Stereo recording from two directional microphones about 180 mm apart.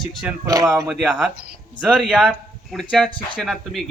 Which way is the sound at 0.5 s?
20° right (ahead or behind).